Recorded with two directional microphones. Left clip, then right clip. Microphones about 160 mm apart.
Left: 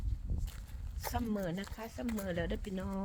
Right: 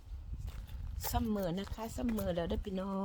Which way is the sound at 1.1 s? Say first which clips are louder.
Right 1 dB; 35° right (ahead or behind).